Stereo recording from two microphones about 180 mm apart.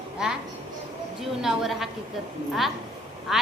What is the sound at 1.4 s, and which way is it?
Speech, centre (ahead or behind).